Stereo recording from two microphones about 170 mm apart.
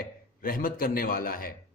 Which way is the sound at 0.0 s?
60° left (ahead or behind).